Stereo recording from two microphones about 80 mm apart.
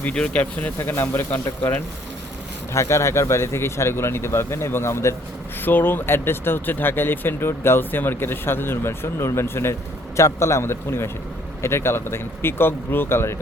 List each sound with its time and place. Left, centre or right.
0.0 s speech: centre
0.8 s speech: left
2.7 s speech: left